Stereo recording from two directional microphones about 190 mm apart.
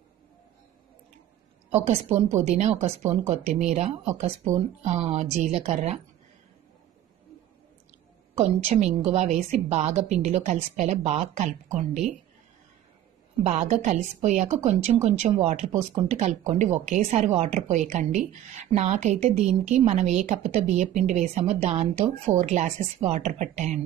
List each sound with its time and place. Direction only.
1.7 s a woman's voice: 35° right (ahead or behind)
8.4 s a woman's voice: 35° right (ahead or behind)
13.4 s a woman's voice: 35° right (ahead or behind)